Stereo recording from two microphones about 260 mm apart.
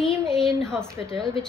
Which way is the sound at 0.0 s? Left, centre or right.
Centre.